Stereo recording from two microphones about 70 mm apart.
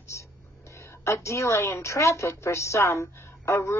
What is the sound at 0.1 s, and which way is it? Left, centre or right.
A woman's voice, left.